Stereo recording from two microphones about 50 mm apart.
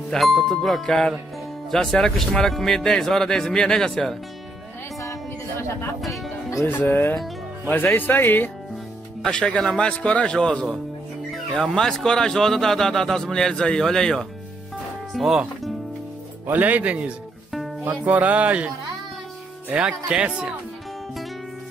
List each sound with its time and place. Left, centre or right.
0.1 s a man's voice: centre
5.9 s music: centre
6.6 s speech: left
9.3 s a man's voice: centre
15.1 s speech: centre
16.4 s speech: right
19.9 s speech: centre